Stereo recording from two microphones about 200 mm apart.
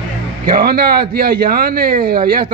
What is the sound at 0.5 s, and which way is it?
A man's voice, 45° right (ahead or behind).